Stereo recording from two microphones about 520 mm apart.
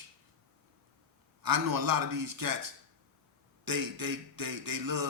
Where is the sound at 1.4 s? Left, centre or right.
Right.